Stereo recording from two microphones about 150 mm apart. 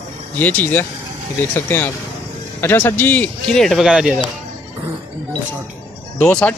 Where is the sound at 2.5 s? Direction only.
15° left (ahead or behind); by 4.2 s 5° right (ahead or behind).